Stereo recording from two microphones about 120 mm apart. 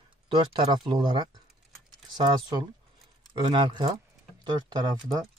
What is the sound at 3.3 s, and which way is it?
Speech, 40° right (ahead or behind).